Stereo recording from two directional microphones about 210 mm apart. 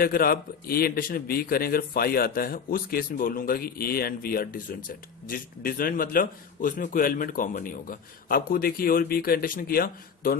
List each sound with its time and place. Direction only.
0.0 s speech: 45° left (ahead or behind)